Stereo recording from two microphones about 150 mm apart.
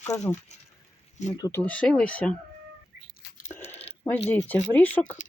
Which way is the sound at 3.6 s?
45° left (ahead or behind).